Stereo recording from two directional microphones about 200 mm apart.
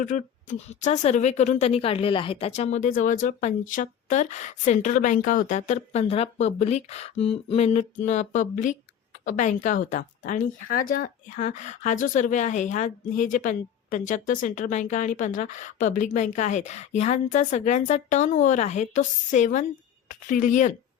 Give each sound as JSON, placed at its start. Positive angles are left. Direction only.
{"t": 0.0, "sound": "speech", "side_deg": 40}